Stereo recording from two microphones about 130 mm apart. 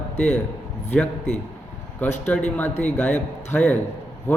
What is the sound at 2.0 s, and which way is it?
A man's voice, 15° left (ahead or behind).